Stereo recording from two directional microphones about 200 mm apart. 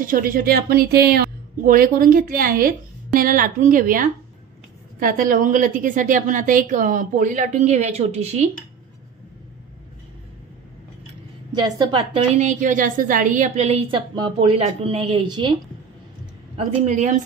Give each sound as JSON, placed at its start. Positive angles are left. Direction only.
{"t": 0.0, "sound": "a woman's voice", "side_deg": -45}
{"t": 11.5, "sound": "a woman's voice", "side_deg": -25}
{"t": 16.5, "sound": "a woman's voice", "side_deg": -35}